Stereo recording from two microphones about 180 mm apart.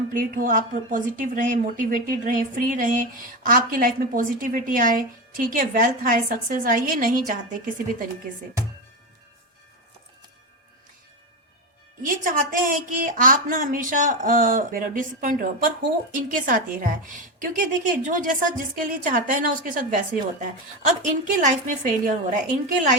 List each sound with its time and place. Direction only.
0.1 s a woman's voice: 50° right (ahead or behind)
12.0 s a woman's voice: 50° right (ahead or behind)